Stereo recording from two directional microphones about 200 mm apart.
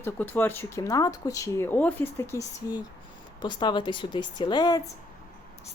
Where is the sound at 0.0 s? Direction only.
10° left (ahead or behind).